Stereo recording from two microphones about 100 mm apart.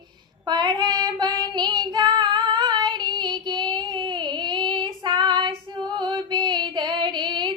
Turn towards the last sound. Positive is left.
turn(degrees=-50)  # may be behind; listen again after turning